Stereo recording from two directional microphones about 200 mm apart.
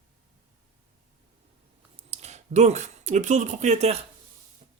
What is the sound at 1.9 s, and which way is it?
Speech, 35° right (ahead or behind).